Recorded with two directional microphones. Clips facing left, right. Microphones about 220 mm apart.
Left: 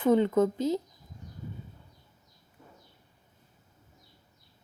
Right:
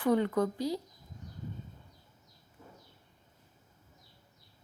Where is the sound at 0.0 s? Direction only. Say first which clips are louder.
Left 5 dB; 20° left (ahead or behind).